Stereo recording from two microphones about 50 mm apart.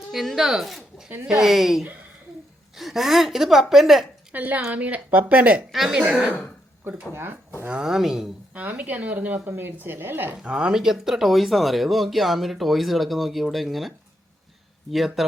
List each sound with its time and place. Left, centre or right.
0.1 s speech: centre
4.3 s a woman's voice: right
5.7 s speech: centre
6.0 s speech: centre
7.1 s a woman's voice: right
7.9 s speech: centre
8.5 s a woman's voice: right
10.4 s speech: centre